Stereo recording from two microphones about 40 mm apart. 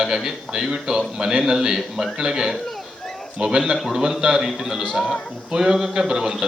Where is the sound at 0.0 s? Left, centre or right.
Centre.